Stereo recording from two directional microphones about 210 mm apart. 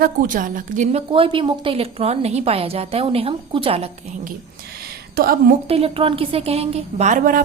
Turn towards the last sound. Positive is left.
turn(degrees=-40)  # may be behind; listen again after turning